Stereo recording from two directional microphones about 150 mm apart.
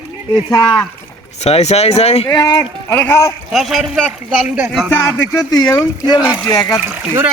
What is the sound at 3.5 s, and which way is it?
Speech, centre (ahead or behind).